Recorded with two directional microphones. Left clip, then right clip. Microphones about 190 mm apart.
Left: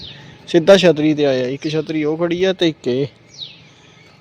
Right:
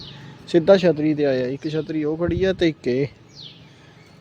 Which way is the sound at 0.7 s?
15° left (ahead or behind).